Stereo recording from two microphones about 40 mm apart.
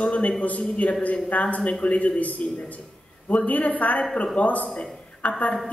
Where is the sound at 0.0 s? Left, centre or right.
Left.